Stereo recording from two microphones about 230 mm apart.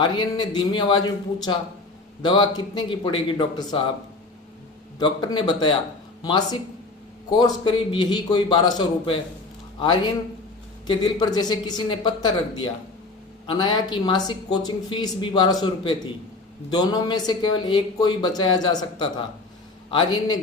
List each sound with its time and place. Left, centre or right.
0.0 s speech: centre
4.9 s speech: centre